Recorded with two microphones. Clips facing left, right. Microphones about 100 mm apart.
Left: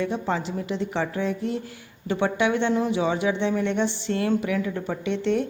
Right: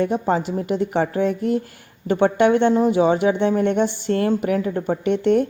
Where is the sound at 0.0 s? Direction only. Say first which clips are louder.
Right 6 dB; 45° right (ahead or behind).